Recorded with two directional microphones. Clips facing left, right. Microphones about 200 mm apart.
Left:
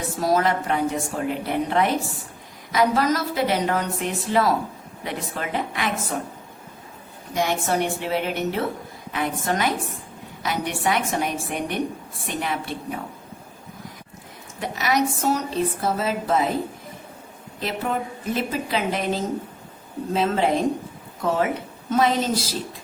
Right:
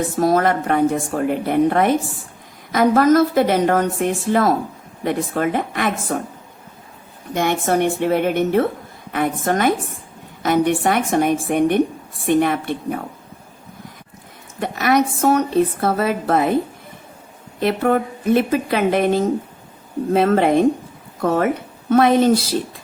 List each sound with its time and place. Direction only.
0.2 s a woman's voice: 55° right (ahead or behind)
7.3 s a woman's voice: 55° right (ahead or behind)
14.6 s speech: 55° right (ahead or behind)
17.6 s speech: 60° right (ahead or behind)